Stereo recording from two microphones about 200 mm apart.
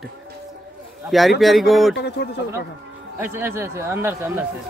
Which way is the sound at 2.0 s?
60° left (ahead or behind).